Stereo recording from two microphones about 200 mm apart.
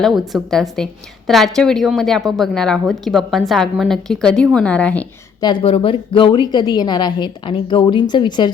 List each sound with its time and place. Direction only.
0.0 s a woman's voice: centre (ahead or behind)
5.4 s a woman's voice: 25° left (ahead or behind)